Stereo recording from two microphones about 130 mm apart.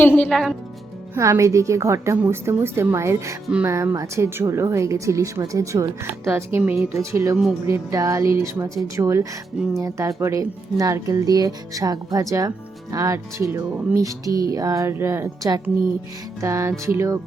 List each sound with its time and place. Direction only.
0.0 s a woman's voice: 15° left (ahead or behind)
0.3 s a woman's voice: centre (ahead or behind)
1.1 s speech: 25° right (ahead or behind)
6.6 s a woman's voice: 10° right (ahead or behind)
6.9 s speech: 20° right (ahead or behind)